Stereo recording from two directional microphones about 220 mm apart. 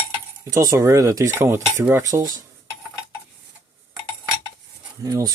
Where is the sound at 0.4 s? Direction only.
15° right (ahead or behind).